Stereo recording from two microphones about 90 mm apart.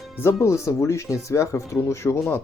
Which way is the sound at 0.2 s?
30° left (ahead or behind).